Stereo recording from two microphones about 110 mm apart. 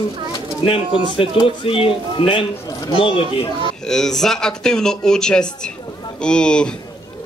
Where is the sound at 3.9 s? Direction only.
5° left (ahead or behind).